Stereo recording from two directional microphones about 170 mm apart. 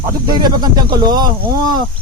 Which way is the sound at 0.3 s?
25° right (ahead or behind).